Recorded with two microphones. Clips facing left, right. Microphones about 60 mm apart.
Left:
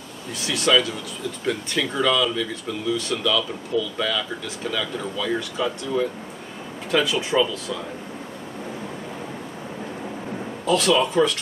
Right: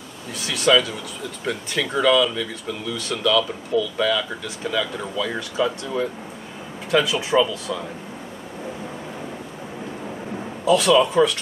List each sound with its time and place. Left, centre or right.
0.4 s speech: centre
10.6 s speech: centre